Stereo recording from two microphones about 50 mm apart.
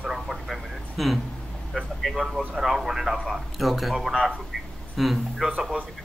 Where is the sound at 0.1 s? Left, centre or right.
Centre.